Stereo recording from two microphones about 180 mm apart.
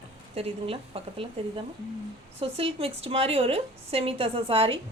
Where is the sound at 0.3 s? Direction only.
30° right (ahead or behind).